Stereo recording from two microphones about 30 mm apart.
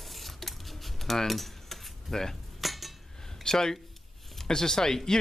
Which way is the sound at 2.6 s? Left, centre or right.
Centre.